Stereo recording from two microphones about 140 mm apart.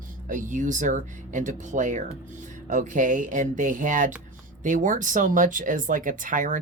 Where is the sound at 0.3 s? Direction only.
70° right (ahead or behind).